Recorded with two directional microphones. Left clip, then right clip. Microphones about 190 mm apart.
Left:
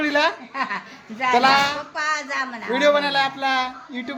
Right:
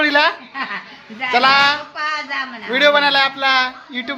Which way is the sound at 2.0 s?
70° left (ahead or behind).